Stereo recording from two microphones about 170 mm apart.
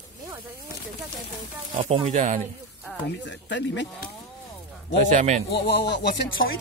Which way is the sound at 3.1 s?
90° left.